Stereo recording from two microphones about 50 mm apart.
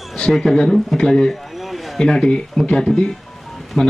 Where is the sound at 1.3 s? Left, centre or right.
Centre.